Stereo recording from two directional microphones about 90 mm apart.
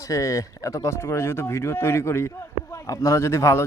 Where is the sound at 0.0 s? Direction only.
35° left (ahead or behind).